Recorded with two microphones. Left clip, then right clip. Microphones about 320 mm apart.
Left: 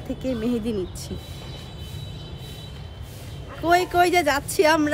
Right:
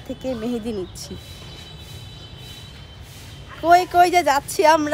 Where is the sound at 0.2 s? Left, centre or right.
Centre.